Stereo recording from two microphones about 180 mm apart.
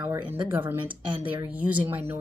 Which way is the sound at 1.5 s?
10° right (ahead or behind).